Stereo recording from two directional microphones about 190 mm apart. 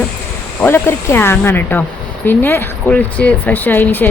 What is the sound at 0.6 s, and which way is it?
Speech, 10° left (ahead or behind).